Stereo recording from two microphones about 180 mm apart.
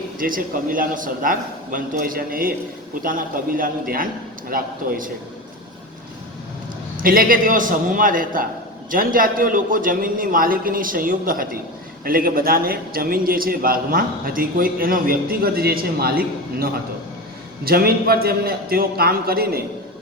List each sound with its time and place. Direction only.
0.2 s a man's voice: 50° right (ahead or behind)
6.9 s a man's voice: 50° right (ahead or behind)
17.7 s a man's voice: 55° right (ahead or behind)